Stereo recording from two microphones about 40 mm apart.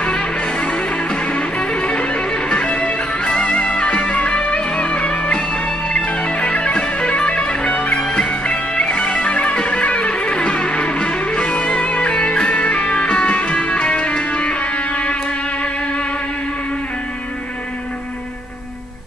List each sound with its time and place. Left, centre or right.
0.0 s music: left